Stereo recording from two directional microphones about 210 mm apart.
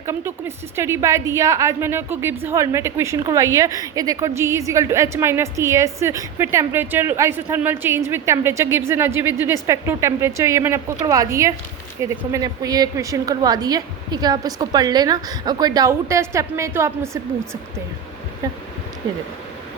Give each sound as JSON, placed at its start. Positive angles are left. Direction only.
{"t": 0.0, "sound": "a woman's voice", "side_deg": -15}